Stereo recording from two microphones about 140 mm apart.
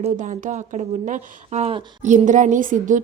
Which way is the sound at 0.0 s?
60° right (ahead or behind).